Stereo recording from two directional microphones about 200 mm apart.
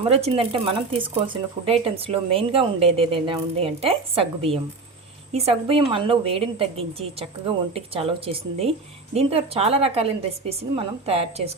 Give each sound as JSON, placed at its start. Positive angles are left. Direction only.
{"t": 0.0, "sound": "a woman's voice", "side_deg": -30}